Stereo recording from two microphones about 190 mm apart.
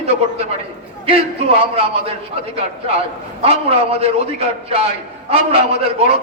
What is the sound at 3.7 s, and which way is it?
A man's voice, 30° right (ahead or behind).